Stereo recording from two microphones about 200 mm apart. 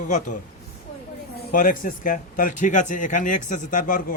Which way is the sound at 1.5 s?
45° left (ahead or behind).